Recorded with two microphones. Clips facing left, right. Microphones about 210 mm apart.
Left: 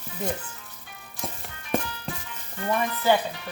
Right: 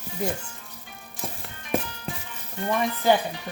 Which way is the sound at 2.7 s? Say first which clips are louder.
Right 1 dB; 15° right (ahead or behind).